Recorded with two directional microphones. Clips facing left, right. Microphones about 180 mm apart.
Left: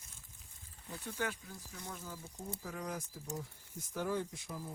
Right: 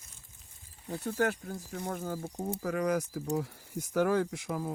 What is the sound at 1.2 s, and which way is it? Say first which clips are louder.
Speech: right 10 dB; 60° right (ahead or behind).